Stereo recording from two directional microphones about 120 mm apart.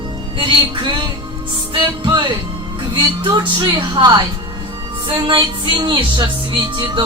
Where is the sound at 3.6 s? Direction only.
45° right (ahead or behind).